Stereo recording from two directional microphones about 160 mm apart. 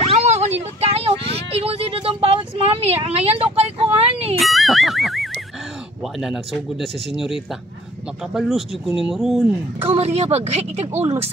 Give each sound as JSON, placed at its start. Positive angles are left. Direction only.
{"t": 0.1, "sound": "a sound", "side_deg": -45}
{"t": 4.4, "sound": "music", "side_deg": 0}
{"t": 6.2, "sound": "speech", "side_deg": 0}
{"t": 9.8, "sound": "speech", "side_deg": -40}